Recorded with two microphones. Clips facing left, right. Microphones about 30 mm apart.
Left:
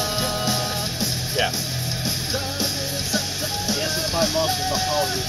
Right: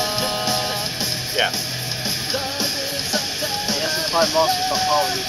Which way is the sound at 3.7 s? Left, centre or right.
Right.